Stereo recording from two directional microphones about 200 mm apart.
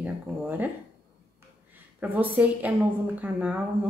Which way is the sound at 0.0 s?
10° right (ahead or behind).